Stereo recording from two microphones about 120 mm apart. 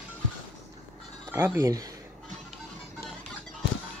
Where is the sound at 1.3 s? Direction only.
20° right (ahead or behind).